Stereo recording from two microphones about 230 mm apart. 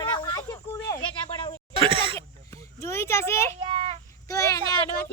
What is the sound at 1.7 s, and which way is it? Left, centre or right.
Speech, right.